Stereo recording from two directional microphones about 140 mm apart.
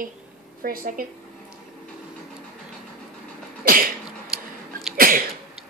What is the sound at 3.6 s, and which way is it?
Sneeze, 90° right.